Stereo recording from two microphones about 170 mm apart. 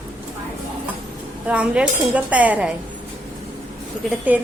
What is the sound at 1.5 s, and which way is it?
A woman's voice, 5° right (ahead or behind).